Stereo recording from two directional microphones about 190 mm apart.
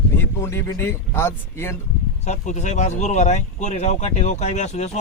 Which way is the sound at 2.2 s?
35° left (ahead or behind).